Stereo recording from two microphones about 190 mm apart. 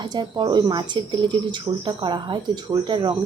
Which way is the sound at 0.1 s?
25° right (ahead or behind).